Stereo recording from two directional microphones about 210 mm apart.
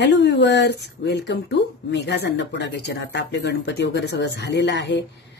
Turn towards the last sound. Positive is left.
turn(degrees=55)  # may be behind; listen again after turning